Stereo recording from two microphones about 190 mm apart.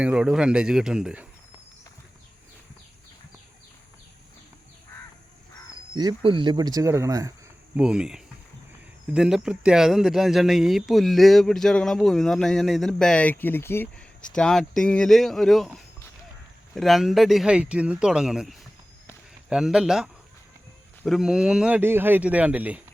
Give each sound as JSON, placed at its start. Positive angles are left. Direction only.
{"t": 0.0, "sound": "speech", "side_deg": -5}
{"t": 5.9, "sound": "speech", "side_deg": -25}
{"t": 7.8, "sound": "speech", "side_deg": -5}